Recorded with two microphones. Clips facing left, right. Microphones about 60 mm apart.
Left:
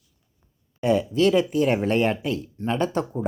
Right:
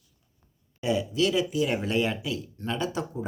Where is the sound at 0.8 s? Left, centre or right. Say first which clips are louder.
Left 5 dB; left.